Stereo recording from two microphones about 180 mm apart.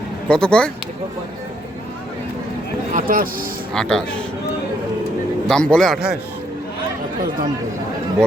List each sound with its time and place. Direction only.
0.3 s a man's voice: 5° left (ahead or behind)
2.9 s speech: 50° right (ahead or behind)
3.8 s a man's voice: 5° left (ahead or behind)
5.5 s a man's voice: 5° left (ahead or behind)